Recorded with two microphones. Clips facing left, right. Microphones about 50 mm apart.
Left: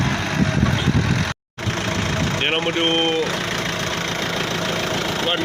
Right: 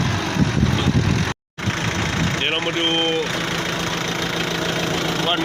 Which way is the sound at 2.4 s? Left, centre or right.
Centre.